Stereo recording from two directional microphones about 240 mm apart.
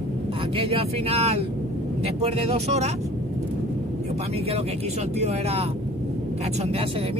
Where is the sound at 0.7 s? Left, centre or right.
Right.